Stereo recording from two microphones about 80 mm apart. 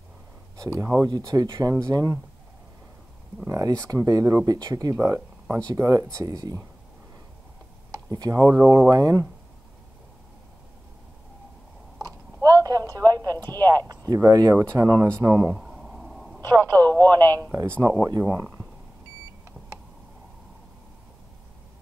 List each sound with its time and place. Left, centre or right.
0.6 s speech: right
1.0 s speech: right
3.4 s speech: right
7.9 s speech: right
12.0 s a sound: right
13.6 s speech: right
15.5 s a sound: centre
16.4 s radio: right
17.0 s speech: right